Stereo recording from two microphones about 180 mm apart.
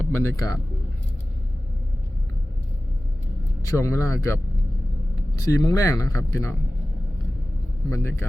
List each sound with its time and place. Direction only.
0.1 s speech: 15° left (ahead or behind)
3.6 s speech: 15° left (ahead or behind)
7.9 s speech: 15° left (ahead or behind)